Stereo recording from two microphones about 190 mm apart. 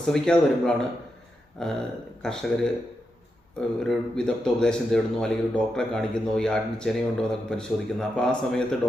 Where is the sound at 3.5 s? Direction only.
5° left (ahead or behind).